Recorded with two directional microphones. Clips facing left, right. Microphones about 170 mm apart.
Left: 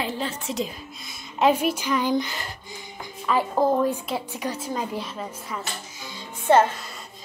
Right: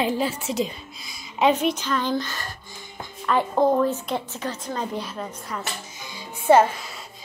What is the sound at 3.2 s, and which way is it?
A woman's voice, 5° left (ahead or behind).